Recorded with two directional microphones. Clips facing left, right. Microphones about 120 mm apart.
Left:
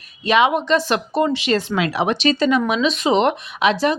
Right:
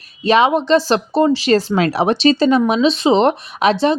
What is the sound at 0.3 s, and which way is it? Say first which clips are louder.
Speech: right 3 dB; 30° right (ahead or behind).